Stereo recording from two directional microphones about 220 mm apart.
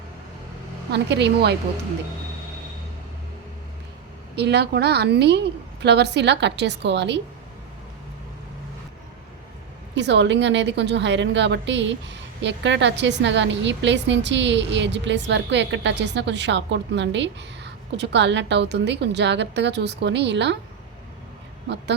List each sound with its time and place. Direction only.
0.9 s a woman's voice: 50° right (ahead or behind)
4.4 s a woman's voice: 50° right (ahead or behind)
9.9 s a woman's voice: 50° right (ahead or behind)